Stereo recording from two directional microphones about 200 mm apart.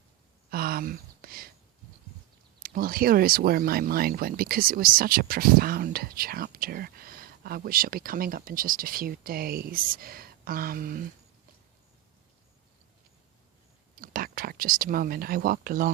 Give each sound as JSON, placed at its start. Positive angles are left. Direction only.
{"t": 0.5, "sound": "a sound", "side_deg": -50}
{"t": 2.6, "sound": "speech", "side_deg": -45}
{"t": 13.9, "sound": "speech", "side_deg": -45}